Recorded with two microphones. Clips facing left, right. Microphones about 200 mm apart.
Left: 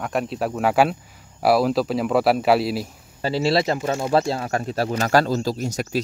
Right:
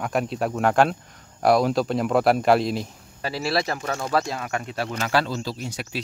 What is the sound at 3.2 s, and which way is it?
Speech, 25° left (ahead or behind).